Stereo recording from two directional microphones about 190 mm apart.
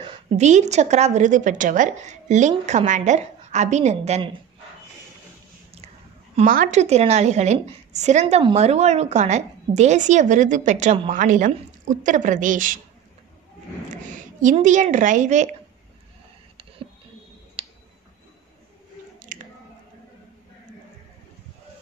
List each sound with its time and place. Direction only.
0.0 s a woman's voice: 35° right (ahead or behind)
6.3 s a woman's voice: 45° right (ahead or behind)
13.8 s a woman's voice: 40° right (ahead or behind)
17.6 s tick: 30° right (ahead or behind)
19.3 s squish: 45° right (ahead or behind)